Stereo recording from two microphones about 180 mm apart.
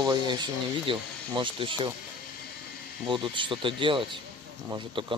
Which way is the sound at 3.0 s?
25° right (ahead or behind).